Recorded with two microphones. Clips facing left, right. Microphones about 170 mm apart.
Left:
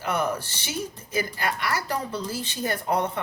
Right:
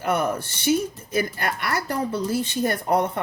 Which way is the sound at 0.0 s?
55° right (ahead or behind).